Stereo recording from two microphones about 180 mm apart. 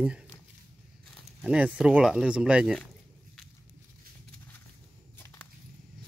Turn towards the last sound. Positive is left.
turn(degrees=10)  # may be behind; listen again after turning